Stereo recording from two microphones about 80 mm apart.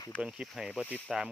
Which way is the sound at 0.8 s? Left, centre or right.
Centre.